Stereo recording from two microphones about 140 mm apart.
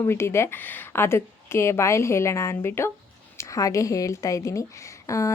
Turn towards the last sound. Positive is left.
turn(degrees=20)  # may be behind; listen again after turning